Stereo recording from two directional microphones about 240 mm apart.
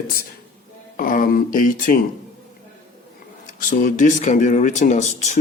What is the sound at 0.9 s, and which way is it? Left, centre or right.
Speech, left.